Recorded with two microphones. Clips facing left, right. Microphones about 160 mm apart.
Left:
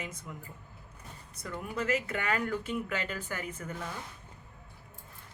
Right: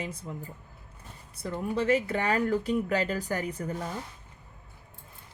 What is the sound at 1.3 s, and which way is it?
Speech, 30° right (ahead or behind).